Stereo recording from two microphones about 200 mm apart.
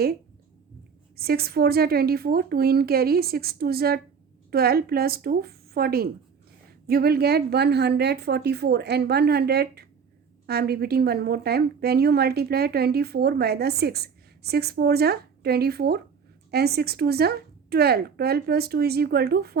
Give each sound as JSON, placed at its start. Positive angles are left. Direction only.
{"t": 1.1, "sound": "a woman's voice", "side_deg": -50}